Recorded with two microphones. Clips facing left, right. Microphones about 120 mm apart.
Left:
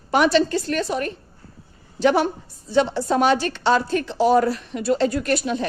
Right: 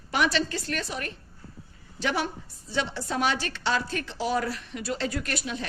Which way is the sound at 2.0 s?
45° left (ahead or behind).